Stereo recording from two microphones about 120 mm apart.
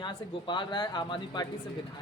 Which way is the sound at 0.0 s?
40° left (ahead or behind).